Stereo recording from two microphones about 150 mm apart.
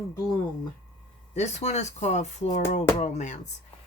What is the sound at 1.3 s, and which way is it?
Speech, 50° left (ahead or behind).